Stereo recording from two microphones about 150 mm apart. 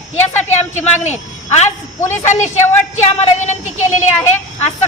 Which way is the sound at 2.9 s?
50° left (ahead or behind).